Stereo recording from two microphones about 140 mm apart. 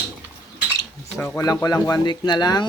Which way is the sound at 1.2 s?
15° left (ahead or behind).